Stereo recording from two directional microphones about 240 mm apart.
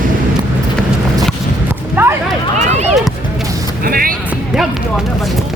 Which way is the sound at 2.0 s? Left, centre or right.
Centre.